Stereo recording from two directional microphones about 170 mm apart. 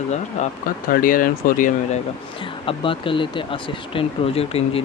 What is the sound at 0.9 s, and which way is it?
Speech, 55° left (ahead or behind).